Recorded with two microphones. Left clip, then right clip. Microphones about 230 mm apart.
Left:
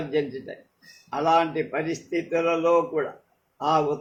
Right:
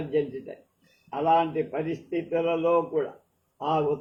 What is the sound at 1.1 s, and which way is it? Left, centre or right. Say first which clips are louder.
A man's voice: left 2 dB; left.